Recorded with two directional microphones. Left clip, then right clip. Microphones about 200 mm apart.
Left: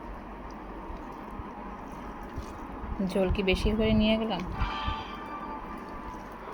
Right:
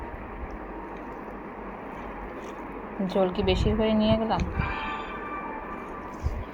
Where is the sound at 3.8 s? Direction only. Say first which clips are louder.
Right 3 dB; 20° left (ahead or behind).